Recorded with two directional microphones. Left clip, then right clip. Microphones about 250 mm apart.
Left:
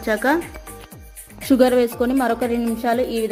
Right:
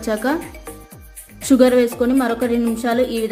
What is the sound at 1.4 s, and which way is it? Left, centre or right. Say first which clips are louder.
A woman's voice: right 2 dB; centre.